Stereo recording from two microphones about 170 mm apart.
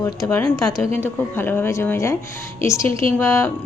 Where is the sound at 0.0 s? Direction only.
15° left (ahead or behind).